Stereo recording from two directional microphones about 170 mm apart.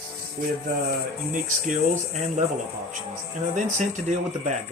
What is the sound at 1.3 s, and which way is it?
Speech, 45° right (ahead or behind).